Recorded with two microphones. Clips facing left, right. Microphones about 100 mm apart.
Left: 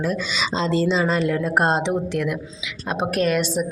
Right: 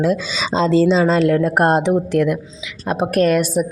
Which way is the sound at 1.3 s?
60° right (ahead or behind).